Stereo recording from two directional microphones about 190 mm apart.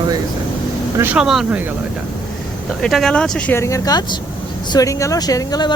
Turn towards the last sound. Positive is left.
turn(degrees=20)  # may be behind; listen again after turning